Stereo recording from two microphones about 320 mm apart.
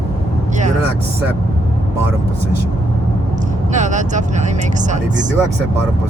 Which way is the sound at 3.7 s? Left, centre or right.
Right.